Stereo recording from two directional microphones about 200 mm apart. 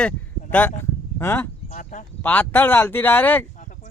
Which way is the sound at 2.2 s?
5° left (ahead or behind).